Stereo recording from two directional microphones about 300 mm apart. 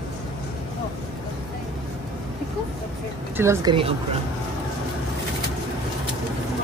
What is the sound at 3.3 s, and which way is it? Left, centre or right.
Speech, centre.